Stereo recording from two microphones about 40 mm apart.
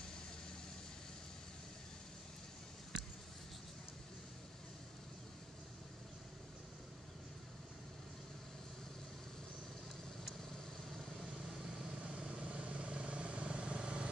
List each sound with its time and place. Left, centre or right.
12.0 s vehicle: right